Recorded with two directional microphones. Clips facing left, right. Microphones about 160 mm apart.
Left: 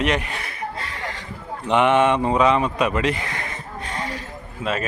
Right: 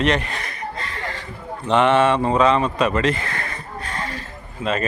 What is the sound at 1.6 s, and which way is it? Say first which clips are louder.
Speech: right 1 dB; 15° left (ahead or behind).